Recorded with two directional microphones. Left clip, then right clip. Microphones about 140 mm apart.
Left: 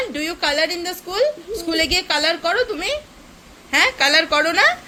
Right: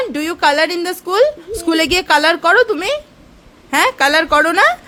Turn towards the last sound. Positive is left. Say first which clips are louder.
# right 4 dB
turn(degrees=-75)  # may be behind; listen again after turning